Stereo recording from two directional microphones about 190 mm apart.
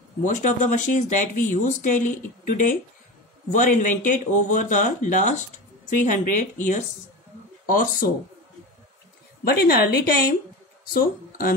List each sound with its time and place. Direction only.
0.2 s speech: 40° left (ahead or behind)
9.4 s a woman's voice: 55° left (ahead or behind)